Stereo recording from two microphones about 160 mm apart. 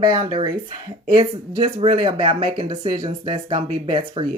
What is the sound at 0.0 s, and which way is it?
Speech, 30° right (ahead or behind).